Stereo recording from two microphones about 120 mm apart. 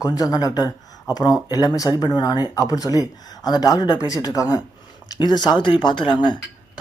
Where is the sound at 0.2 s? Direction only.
30° left (ahead or behind).